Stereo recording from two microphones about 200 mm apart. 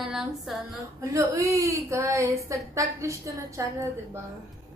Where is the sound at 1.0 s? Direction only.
15° right (ahead or behind).